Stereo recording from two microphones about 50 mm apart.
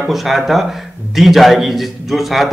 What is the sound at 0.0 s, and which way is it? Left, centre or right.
Speech, centre.